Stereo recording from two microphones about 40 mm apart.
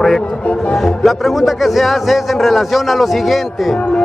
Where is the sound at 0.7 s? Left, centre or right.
Centre.